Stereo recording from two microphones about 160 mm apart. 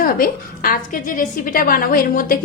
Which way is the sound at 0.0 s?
65° left (ahead or behind).